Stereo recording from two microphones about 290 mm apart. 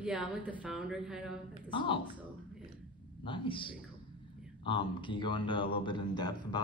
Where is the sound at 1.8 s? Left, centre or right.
Centre.